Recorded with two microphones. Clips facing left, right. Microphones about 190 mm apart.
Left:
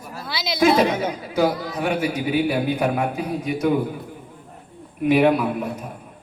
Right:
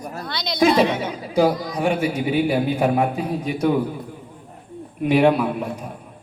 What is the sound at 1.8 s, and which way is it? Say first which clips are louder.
Music: right 2 dB; 30° right (ahead or behind).